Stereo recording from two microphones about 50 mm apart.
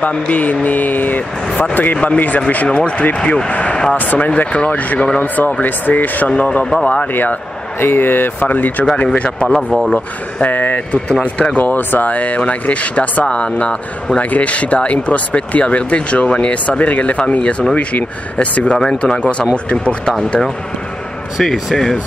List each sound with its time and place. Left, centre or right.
0.3 s speech: left
3.2 s speech: centre
3.4 s speech: left
3.9 s speech: left
7.1 s speech: left
10.4 s speech: left
21.4 s speech: centre